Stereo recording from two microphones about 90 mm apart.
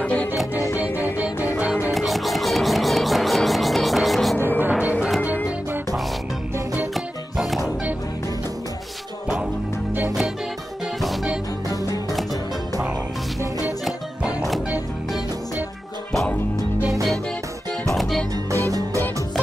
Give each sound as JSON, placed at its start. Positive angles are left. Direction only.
{"t": 0.0, "sound": "music", "side_deg": 15}
{"t": 1.9, "sound": "music", "side_deg": 0}
{"t": 4.6, "sound": "music", "side_deg": -15}
{"t": 6.9, "sound": "music", "side_deg": 0}
{"t": 13.8, "sound": "music", "side_deg": 0}
{"t": 17.8, "sound": "music", "side_deg": 0}
{"t": 18.5, "sound": "music", "side_deg": -40}